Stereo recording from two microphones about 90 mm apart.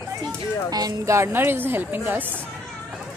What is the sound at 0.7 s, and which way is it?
Speech, 45° right (ahead or behind).